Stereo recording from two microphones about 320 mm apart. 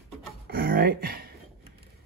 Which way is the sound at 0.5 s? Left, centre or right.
Right.